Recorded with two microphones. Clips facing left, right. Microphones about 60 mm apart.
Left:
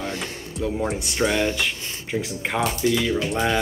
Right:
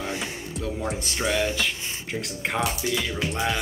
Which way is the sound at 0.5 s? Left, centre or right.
Centre.